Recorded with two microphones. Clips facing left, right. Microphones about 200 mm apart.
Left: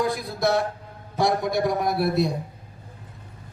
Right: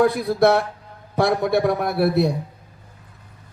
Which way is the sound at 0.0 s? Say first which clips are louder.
Right 8 dB; 60° right (ahead or behind).